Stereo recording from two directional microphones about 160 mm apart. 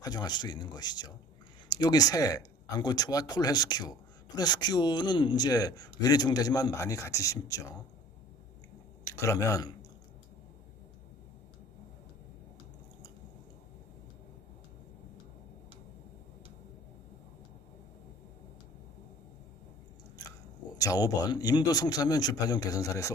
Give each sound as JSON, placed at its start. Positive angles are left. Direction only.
{"t": 0.0, "sound": "a man's voice", "side_deg": 25}
{"t": 9.1, "sound": "a man's voice", "side_deg": 15}
{"t": 20.7, "sound": "a man's voice", "side_deg": 20}